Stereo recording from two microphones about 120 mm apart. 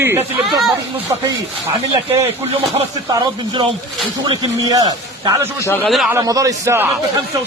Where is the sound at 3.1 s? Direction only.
35° right (ahead or behind).